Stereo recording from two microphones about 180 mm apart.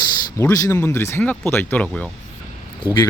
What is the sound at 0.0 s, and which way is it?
Speech, 20° left (ahead or behind).